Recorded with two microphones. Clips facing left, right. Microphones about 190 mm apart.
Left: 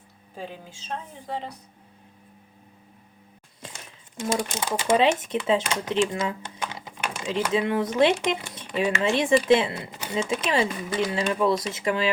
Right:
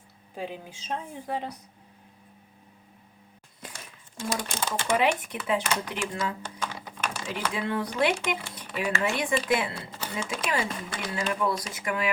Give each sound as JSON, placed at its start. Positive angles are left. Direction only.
{"t": 0.3, "sound": "speech", "side_deg": -15}
{"t": 4.2, "sound": "speech", "side_deg": 20}